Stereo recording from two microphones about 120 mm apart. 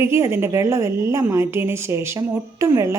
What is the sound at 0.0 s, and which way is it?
A woman's voice, 20° right (ahead or behind).